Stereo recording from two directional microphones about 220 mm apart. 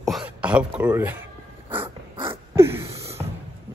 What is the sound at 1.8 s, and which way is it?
Dog, 20° right (ahead or behind).